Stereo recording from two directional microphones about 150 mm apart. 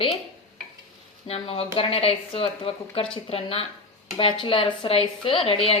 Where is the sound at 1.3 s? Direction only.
40° left (ahead or behind).